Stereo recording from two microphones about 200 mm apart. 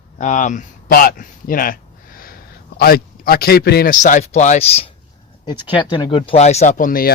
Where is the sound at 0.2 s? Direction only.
40° left (ahead or behind).